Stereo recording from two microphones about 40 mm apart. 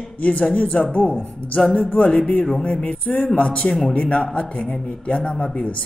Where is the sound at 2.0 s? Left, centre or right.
Left.